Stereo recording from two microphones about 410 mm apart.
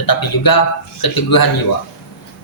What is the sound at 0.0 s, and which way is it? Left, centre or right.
A man's voice, left.